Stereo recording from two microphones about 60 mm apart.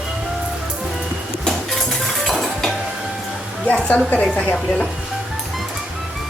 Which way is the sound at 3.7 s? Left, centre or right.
Left.